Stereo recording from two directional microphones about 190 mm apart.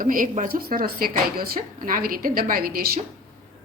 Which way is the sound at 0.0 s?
45° right (ahead or behind).